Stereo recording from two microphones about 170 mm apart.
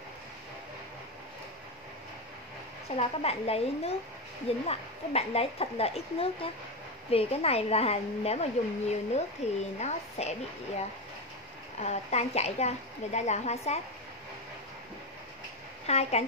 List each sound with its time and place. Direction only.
3.0 s speech: 35° left (ahead or behind)
11.8 s speech: 40° left (ahead or behind)
15.9 s speech: 40° left (ahead or behind)